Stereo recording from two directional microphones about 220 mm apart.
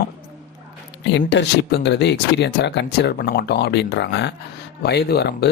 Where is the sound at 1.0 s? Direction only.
55° left (ahead or behind).